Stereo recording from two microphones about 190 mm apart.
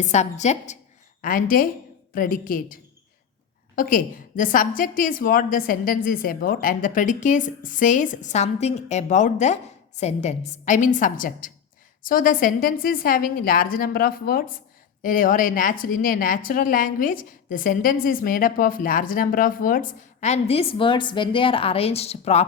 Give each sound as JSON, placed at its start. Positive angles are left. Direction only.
{"t": 0.0, "sound": "a woman's voice", "side_deg": 35}
{"t": 3.8, "sound": "a woman's voice", "side_deg": 45}